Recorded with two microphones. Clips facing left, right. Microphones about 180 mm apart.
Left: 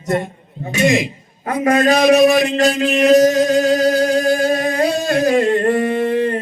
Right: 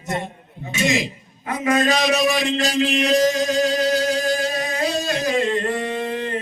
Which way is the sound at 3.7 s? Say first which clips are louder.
Left 6 dB; 50° left (ahead or behind).